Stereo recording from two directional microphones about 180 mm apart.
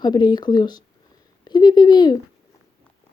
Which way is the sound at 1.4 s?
25° left (ahead or behind).